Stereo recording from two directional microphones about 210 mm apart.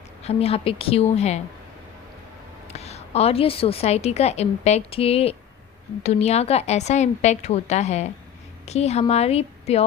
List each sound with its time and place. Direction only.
0.2 s a woman's voice: 30° left (ahead or behind)
2.7 s a woman's voice: 30° left (ahead or behind)